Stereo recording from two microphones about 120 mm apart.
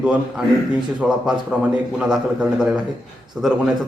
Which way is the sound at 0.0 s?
10° right (ahead or behind).